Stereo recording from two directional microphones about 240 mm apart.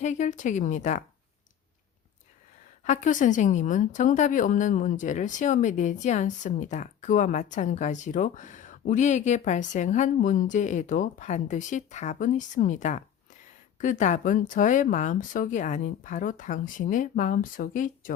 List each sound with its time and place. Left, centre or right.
0.0 s a woman's voice: left
2.8 s a woman's voice: left